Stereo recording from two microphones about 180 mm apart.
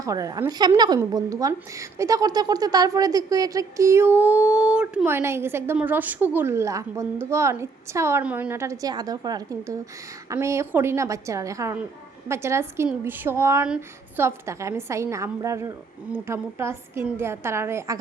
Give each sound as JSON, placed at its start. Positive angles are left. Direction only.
{"t": 0.0, "sound": "a woman's voice", "side_deg": -20}